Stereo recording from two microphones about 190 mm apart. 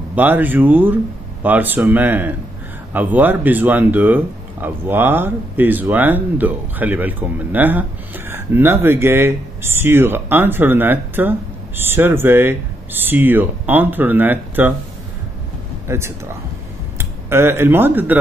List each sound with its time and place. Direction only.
0.1 s speech: 10° right (ahead or behind)
15.9 s speech: 15° right (ahead or behind)